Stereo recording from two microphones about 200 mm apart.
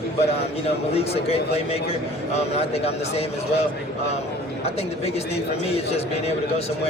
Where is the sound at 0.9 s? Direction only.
30° left (ahead or behind).